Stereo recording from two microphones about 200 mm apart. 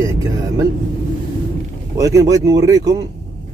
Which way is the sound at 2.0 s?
15° right (ahead or behind).